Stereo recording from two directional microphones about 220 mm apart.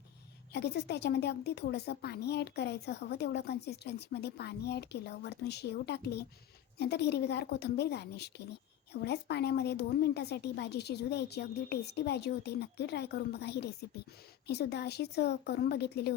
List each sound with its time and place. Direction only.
0.5 s a woman's voice: 50° left (ahead or behind)